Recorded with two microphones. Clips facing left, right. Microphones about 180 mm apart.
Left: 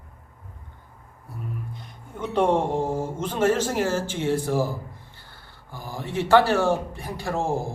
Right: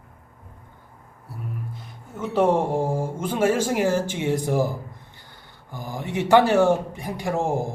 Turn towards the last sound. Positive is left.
turn(degrees=-15)  # may be behind; listen again after turning